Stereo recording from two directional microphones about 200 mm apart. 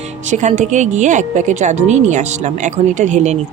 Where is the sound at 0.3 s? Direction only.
35° right (ahead or behind).